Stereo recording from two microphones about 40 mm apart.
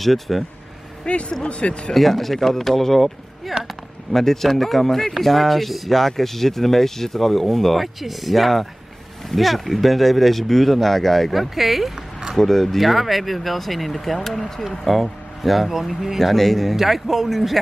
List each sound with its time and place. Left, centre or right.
0.0 s speech: centre
1.1 s speech: left
2.0 s speech: centre
11.9 s a sound: centre
12.4 s speech: centre